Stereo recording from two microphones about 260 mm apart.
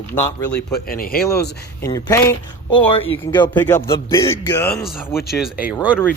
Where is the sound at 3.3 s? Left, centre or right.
Centre.